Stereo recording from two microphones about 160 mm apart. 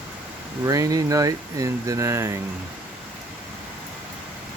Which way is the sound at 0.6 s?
20° right (ahead or behind).